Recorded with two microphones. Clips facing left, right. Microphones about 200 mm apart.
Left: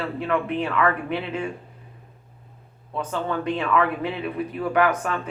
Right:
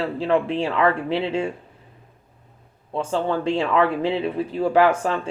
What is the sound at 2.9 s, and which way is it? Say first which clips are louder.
Speech: right 4 dB; 30° right (ahead or behind).